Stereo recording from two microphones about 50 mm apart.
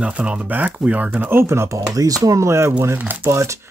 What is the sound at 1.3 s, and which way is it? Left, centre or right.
Speech, right.